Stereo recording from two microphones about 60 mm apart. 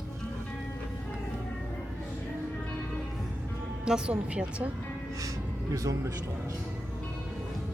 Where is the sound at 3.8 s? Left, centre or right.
Centre.